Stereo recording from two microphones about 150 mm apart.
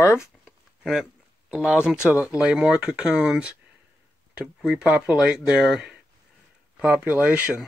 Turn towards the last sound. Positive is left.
turn(degrees=-10)  # may be behind; listen again after turning